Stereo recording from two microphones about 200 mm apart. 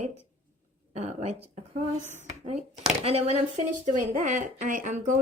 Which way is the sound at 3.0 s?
30° right (ahead or behind).